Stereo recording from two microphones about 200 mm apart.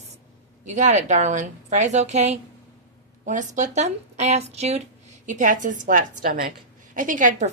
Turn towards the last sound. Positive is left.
turn(degrees=-40)  # may be behind; listen again after turning